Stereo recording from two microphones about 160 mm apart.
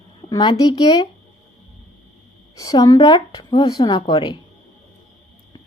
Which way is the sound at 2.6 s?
25° left (ahead or behind).